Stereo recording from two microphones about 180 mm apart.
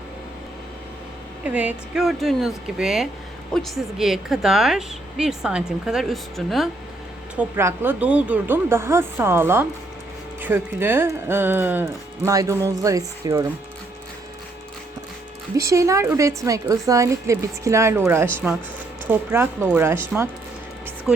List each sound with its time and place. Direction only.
1.5 s a woman's voice: 5° right (ahead or behind)
7.3 s speech: 15° right (ahead or behind)
15.5 s speech: 15° right (ahead or behind)